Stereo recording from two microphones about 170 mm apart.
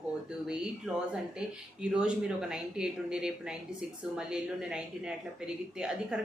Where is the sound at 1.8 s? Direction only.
5° right (ahead or behind).